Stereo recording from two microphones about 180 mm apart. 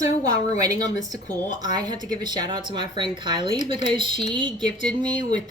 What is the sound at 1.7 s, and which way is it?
Speech, 25° right (ahead or behind).